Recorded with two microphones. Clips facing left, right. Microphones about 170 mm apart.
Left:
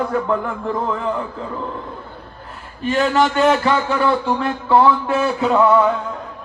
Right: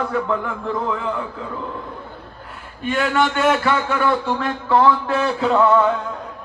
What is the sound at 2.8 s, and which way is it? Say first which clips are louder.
Speech: left 3 dB; 35° left (ahead or behind).